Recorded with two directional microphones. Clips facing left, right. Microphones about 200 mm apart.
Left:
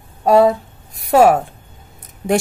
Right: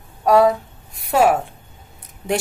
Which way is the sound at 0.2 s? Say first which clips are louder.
Left 2 dB; 25° left (ahead or behind).